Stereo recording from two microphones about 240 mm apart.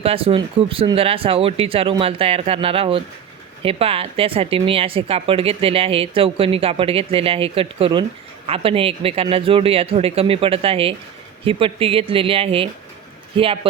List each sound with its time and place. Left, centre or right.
0.0 s speech: right